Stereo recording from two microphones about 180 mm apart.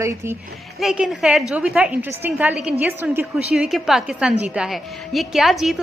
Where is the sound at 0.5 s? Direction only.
Centre (ahead or behind).